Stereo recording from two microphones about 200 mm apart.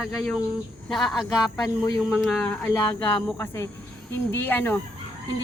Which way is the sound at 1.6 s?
20° left (ahead or behind).